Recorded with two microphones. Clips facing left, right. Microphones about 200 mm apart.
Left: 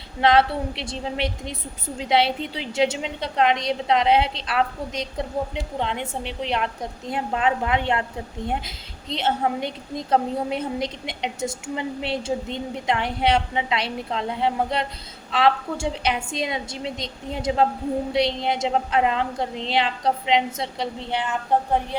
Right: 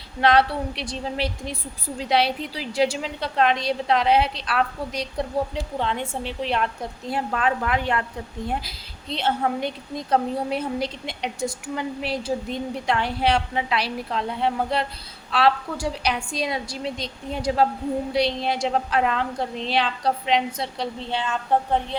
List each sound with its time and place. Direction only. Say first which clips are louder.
0.2 s a woman's voice: left 1 dB; 25° left (ahead or behind)